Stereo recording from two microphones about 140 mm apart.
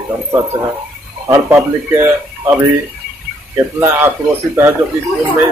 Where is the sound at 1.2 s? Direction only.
20° right (ahead or behind).